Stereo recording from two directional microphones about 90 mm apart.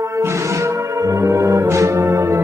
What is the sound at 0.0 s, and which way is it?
Music, 35° right (ahead or behind).